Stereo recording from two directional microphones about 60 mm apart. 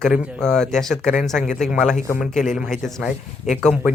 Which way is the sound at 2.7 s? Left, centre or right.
Centre.